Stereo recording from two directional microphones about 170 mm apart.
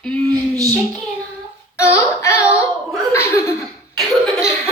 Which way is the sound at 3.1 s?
15° left (ahead or behind).